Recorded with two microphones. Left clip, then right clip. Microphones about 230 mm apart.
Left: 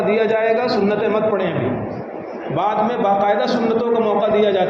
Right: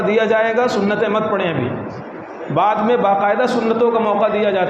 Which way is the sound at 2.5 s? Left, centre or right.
Right.